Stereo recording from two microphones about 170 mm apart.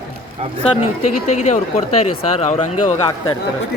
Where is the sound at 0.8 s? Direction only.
40° left (ahead or behind).